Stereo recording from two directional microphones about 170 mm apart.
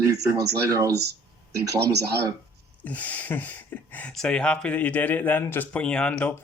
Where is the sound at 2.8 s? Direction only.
10° left (ahead or behind).